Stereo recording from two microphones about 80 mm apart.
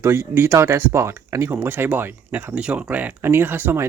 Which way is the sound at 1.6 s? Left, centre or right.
Right.